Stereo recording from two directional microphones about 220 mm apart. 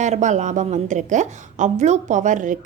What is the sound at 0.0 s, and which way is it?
A woman's voice, 35° right (ahead or behind).